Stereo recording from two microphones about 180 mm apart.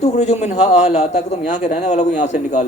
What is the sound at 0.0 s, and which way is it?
A man's voice, 40° left (ahead or behind).